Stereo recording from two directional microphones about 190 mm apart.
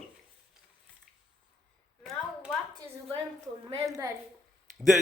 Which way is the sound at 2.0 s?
Centre (ahead or behind).